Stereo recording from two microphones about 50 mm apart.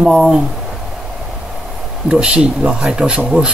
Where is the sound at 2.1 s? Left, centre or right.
Centre.